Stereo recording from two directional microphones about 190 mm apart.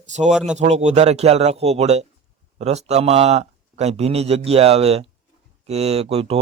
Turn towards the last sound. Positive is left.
turn(degrees=-30)  # may be behind; listen again after turning